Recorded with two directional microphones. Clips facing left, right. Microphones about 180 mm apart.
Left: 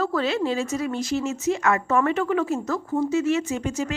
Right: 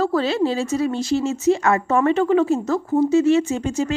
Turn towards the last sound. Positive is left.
turn(degrees=-30)  # may be behind; listen again after turning